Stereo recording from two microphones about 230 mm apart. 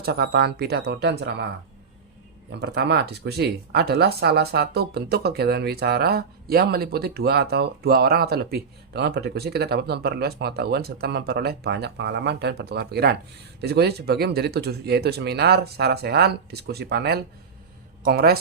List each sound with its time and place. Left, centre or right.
0.0 s speech: right
2.6 s speech: right